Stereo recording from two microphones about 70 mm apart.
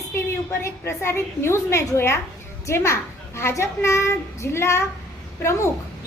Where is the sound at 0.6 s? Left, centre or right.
Left.